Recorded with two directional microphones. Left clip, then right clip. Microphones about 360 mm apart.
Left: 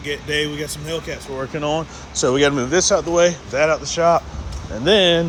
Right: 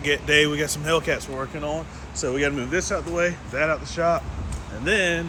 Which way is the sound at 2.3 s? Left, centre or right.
Left.